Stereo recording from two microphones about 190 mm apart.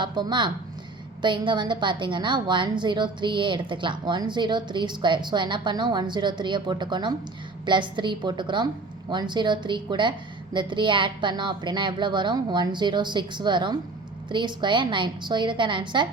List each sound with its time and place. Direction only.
0.0 s a woman's voice: 25° right (ahead or behind)